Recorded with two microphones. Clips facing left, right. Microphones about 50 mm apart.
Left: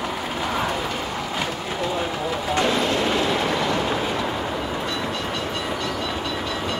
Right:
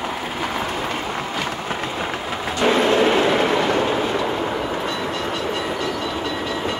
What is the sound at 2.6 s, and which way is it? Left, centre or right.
Train, right.